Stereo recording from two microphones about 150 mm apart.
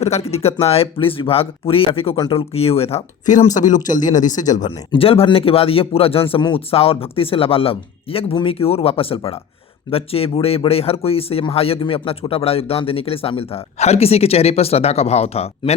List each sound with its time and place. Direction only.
0.0 s speech: 45° left (ahead or behind)
4.6 s speech: 35° left (ahead or behind)